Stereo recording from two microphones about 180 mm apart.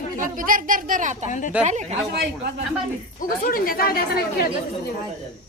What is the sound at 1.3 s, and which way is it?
Speech, 45° left (ahead or behind).